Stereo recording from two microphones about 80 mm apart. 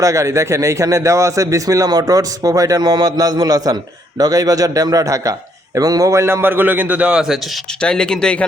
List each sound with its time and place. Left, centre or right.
0.0 s a man's voice: right; by 7.3 s centre
7.8 s speech: centre